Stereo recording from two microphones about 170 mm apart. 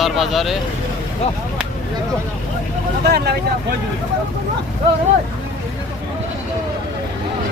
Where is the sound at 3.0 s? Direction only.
75° right (ahead or behind).